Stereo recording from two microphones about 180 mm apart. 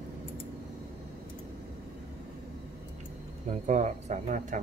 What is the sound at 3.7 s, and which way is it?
Speech, 40° right (ahead or behind).